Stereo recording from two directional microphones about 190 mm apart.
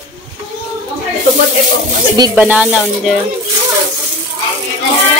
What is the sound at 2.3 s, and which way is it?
Speech, 5° right (ahead or behind).